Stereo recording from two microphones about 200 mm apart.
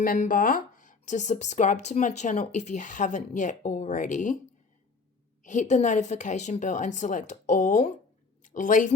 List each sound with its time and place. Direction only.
0.0 s speech: 45° left (ahead or behind)
5.4 s speech: 40° left (ahead or behind)